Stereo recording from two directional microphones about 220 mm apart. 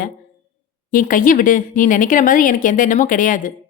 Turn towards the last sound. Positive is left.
turn(degrees=35)  # may be behind; listen again after turning